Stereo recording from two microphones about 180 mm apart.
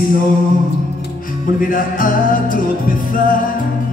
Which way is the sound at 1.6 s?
50° left (ahead or behind).